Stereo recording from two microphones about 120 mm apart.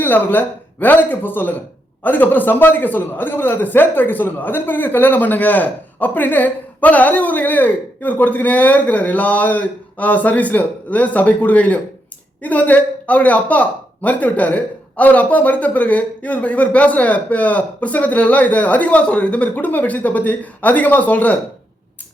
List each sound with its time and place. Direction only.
0.0 s a man's voice: 15° left (ahead or behind)